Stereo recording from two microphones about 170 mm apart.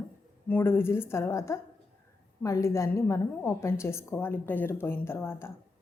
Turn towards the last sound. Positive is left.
turn(degrees=15)  # may be behind; listen again after turning